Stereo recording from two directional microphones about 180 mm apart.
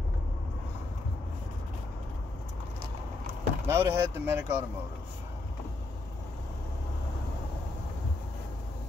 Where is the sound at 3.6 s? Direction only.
15° right (ahead or behind).